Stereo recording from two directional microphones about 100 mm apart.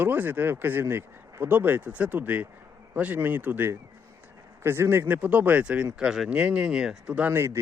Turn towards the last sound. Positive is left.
turn(degrees=-25)  # may be behind; listen again after turning